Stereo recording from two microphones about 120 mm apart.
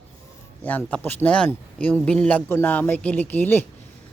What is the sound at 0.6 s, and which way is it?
A man's voice, 15° left (ahead or behind).